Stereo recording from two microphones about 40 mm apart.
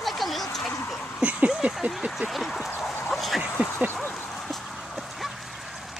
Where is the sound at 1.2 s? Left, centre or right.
Right.